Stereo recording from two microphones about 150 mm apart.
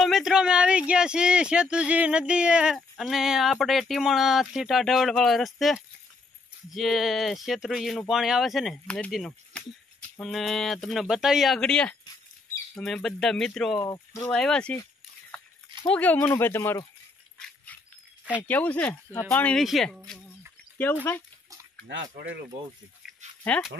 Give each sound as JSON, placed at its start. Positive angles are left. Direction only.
{"t": 0.0, "sound": "speech", "side_deg": -5}
{"t": 13.7, "sound": "speech", "side_deg": 20}
{"t": 14.3, "sound": "speech", "side_deg": 5}
{"t": 15.9, "sound": "speech", "side_deg": 10}
{"t": 18.5, "sound": "speech", "side_deg": 10}
{"t": 23.4, "sound": "speech", "side_deg": 10}